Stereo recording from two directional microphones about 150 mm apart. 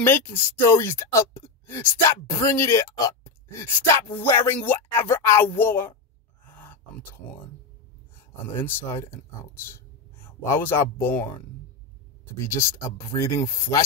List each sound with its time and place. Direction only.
0.0 s speech: 15° left (ahead or behind)
6.4 s grunt: 15° left (ahead or behind)
8.5 s speech: 15° left (ahead or behind)